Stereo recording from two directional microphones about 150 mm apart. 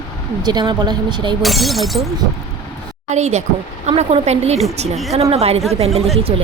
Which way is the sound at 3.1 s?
50° right (ahead or behind).